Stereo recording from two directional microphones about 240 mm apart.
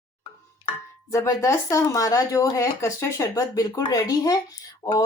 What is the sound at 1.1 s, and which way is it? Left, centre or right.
Speech, centre.